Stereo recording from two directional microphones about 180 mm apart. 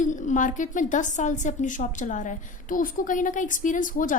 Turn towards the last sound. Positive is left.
turn(degrees=45)  # may be behind; listen again after turning